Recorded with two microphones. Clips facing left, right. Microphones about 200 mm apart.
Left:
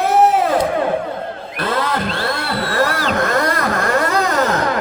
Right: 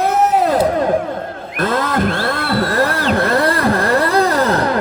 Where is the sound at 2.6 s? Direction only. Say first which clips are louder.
Right 1 dB; 35° right (ahead or behind).